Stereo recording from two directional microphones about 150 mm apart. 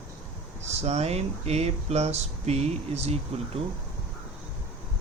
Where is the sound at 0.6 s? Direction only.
45° right (ahead or behind).